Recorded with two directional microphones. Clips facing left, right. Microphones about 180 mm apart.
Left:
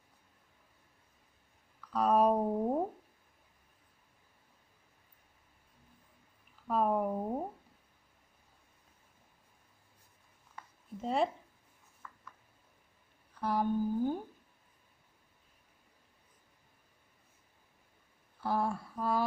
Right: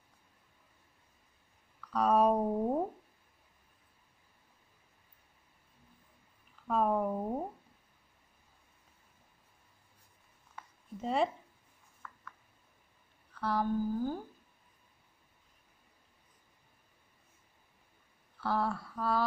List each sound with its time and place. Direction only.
1.9 s speech: centre (ahead or behind)
6.7 s speech: 5° left (ahead or behind)
10.5 s a sound: centre (ahead or behind)
13.3 s speech: 15° left (ahead or behind)
18.4 s speech: 15° left (ahead or behind)